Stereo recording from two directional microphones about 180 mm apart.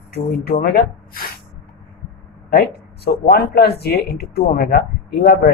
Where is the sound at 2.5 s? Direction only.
60° left (ahead or behind).